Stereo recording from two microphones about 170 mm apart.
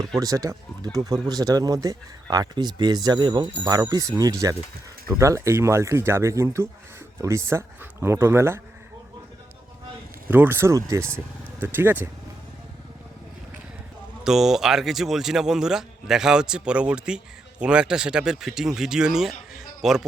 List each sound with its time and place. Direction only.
0.2 s speech: 20° right (ahead or behind)
10.2 s speech: 10° right (ahead or behind)
14.3 s a man's voice: centre (ahead or behind)